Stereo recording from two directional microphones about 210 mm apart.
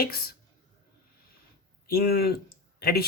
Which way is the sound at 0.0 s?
45° left (ahead or behind).